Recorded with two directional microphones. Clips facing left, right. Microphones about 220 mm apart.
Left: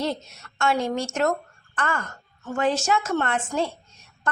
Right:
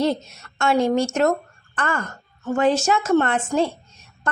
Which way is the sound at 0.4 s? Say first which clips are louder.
Right 1 dB; 30° right (ahead or behind).